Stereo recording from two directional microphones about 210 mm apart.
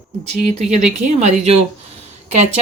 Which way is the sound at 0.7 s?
35° right (ahead or behind).